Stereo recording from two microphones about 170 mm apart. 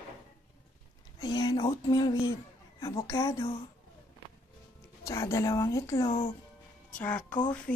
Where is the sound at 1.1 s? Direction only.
20° left (ahead or behind).